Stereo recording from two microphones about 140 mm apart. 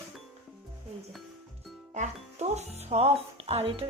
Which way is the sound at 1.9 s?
55° right (ahead or behind).